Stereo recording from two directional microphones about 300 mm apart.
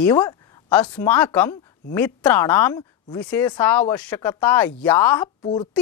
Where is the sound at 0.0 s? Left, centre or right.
Centre.